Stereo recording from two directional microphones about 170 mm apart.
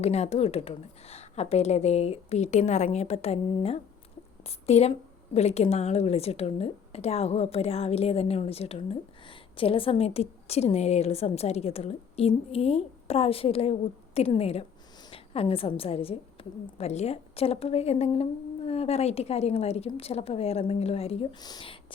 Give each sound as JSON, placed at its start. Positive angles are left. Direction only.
{"t": 0.0, "sound": "a woman's voice", "side_deg": 40}
{"t": 21.3, "sound": "speech", "side_deg": 25}